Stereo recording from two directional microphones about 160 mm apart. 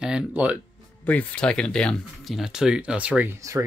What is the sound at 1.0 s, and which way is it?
Speech, 10° left (ahead or behind).